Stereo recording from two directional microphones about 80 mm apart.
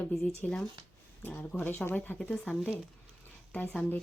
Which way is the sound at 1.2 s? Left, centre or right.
Left.